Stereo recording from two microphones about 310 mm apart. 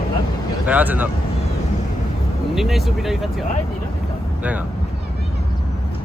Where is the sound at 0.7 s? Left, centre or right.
Centre.